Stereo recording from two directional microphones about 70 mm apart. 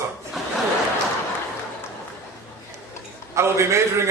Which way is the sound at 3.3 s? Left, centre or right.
Right.